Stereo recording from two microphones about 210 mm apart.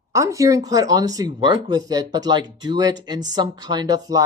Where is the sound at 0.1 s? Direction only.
15° right (ahead or behind).